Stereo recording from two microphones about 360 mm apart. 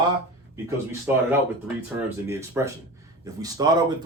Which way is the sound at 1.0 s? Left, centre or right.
Centre.